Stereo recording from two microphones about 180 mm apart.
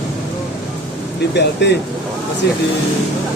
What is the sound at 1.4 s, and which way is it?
Speech, 75° left (ahead or behind).